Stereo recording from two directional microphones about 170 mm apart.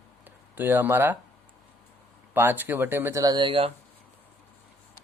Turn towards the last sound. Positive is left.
turn(degrees=-30)  # may be behind; listen again after turning